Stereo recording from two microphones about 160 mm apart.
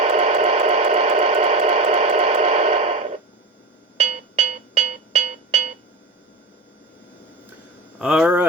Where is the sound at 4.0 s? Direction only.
45° right (ahead or behind).